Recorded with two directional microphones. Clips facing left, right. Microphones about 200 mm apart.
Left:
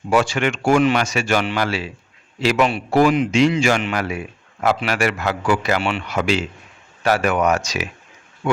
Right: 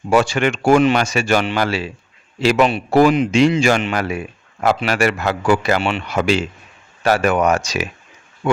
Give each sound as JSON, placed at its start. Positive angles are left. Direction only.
{"t": 0.1, "sound": "speech", "side_deg": -40}
{"t": 0.8, "sound": "speech", "side_deg": -25}
{"t": 5.8, "sound": "speech", "side_deg": -25}
{"t": 6.1, "sound": "speech", "side_deg": -35}